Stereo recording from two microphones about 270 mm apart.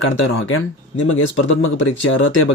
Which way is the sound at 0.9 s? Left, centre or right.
Left.